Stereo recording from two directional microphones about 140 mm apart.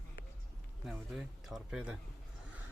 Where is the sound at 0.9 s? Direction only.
Centre (ahead or behind).